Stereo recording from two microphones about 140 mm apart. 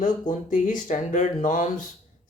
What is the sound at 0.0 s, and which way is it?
Speech, 65° left (ahead or behind).